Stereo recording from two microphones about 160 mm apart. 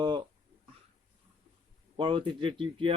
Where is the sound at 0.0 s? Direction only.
30° right (ahead or behind).